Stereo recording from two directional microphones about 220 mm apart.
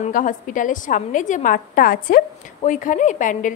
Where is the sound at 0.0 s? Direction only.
35° left (ahead or behind).